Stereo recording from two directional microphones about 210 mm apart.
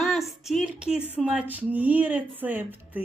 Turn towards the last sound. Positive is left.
turn(degrees=-10)  # may be behind; listen again after turning